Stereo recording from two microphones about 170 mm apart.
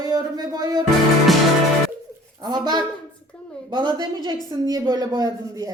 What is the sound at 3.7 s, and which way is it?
A man's voice, 25° right (ahead or behind).